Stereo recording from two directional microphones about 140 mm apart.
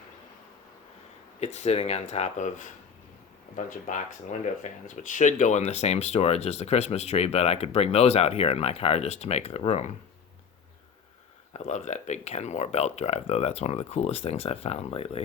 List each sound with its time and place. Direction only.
1.4 s speech: 50° left (ahead or behind)
11.5 s speech: 55° left (ahead or behind)